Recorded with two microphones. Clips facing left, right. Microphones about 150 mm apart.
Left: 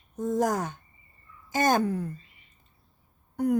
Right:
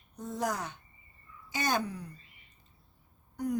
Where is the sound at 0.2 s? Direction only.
45° left (ahead or behind).